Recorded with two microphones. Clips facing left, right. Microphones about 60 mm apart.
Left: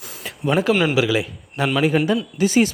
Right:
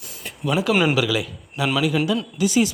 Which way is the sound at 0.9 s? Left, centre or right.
Left.